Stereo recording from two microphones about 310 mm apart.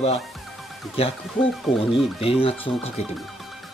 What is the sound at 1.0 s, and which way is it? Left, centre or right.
Speech, centre.